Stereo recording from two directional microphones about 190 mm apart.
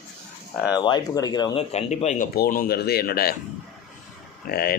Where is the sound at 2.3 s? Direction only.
50° left (ahead or behind).